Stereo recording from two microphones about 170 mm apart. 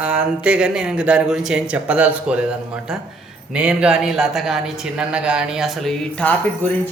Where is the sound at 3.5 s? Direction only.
5° right (ahead or behind).